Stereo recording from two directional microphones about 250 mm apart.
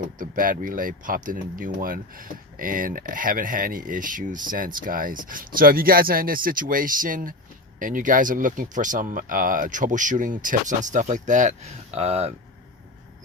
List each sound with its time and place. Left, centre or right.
0.2 s speech: right